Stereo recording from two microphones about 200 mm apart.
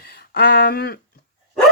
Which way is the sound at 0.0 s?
50° left (ahead or behind).